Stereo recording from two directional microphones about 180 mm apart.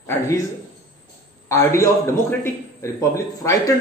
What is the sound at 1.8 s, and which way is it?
A man's voice, 15° left (ahead or behind).